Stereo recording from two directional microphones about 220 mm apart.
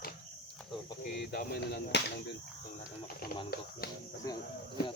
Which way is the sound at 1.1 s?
45° left (ahead or behind).